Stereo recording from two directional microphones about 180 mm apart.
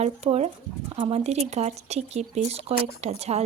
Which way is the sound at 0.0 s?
40° right (ahead or behind).